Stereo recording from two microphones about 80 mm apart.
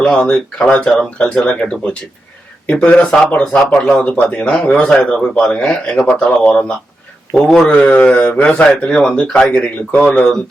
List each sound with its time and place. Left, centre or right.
0.0 s speech: centre
7.7 s speech: centre